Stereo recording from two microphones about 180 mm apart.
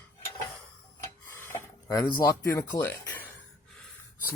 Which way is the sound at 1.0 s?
10° left (ahead or behind).